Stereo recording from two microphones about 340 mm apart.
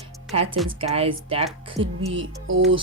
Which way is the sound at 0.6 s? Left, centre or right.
Centre.